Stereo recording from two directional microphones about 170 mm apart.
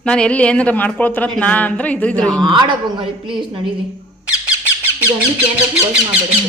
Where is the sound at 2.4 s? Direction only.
25° right (ahead or behind).